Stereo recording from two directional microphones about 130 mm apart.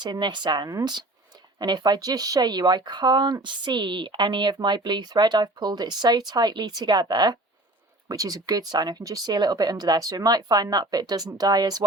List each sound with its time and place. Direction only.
0.0 s speech: 35° right (ahead or behind)